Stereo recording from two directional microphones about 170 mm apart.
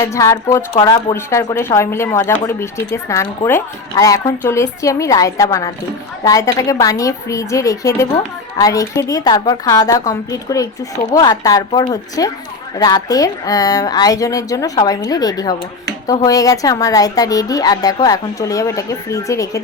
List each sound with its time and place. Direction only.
0.0 s a woman's voice: 15° left (ahead or behind)